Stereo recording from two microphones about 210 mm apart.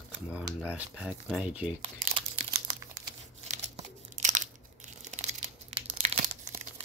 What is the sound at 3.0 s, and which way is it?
Crumpling, 35° right (ahead or behind).